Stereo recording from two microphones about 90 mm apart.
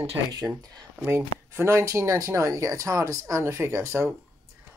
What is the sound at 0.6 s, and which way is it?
Speech, 45° right (ahead or behind).